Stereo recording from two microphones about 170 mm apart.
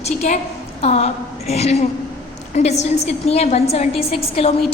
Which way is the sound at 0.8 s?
40° left (ahead or behind).